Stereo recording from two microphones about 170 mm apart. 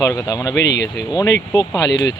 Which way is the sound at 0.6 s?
90° left.